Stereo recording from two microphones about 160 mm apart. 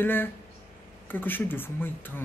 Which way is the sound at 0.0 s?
10° left (ahead or behind).